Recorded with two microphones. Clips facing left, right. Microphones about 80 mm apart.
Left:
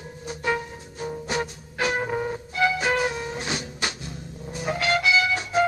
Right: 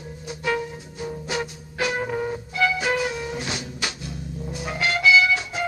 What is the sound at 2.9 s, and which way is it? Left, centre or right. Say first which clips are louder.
Music: even; left.